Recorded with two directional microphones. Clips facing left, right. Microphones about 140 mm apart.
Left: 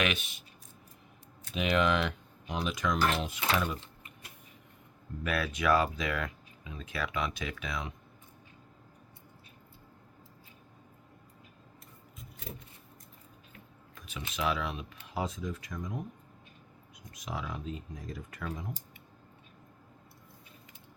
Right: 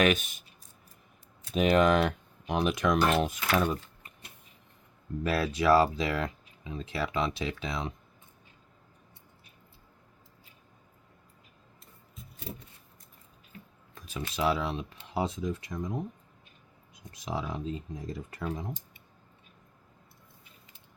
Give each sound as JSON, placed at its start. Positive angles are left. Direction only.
{"t": 0.0, "sound": "speech", "side_deg": -45}
{"t": 1.5, "sound": "speech", "side_deg": -40}
{"t": 3.5, "sound": "speech", "side_deg": -35}
{"t": 5.2, "sound": "speech", "side_deg": -30}
{"t": 13.9, "sound": "a sound", "side_deg": -35}
{"t": 14.3, "sound": "speech", "side_deg": -30}